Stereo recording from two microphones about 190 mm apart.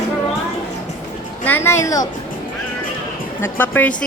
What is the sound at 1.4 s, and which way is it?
Speech, 10° left (ahead or behind).